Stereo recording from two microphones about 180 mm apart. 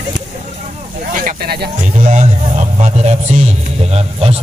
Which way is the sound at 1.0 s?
50° right (ahead or behind).